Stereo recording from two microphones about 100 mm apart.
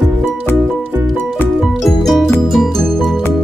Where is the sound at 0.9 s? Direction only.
25° right (ahead or behind).